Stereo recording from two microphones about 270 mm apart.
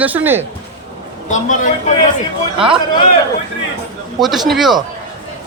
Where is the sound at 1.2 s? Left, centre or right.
Left.